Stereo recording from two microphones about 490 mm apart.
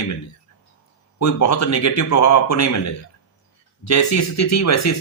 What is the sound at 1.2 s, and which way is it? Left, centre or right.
Speech, left.